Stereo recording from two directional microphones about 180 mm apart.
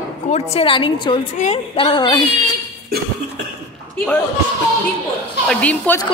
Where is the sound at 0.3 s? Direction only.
35° left (ahead or behind).